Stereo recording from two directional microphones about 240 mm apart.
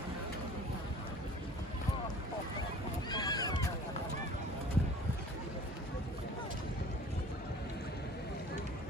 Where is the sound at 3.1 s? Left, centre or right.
Centre.